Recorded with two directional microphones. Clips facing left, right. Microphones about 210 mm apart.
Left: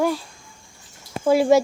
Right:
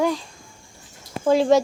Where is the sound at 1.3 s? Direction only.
10° left (ahead or behind).